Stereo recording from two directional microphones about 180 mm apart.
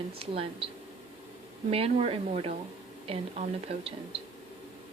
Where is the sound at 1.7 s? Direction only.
30° right (ahead or behind).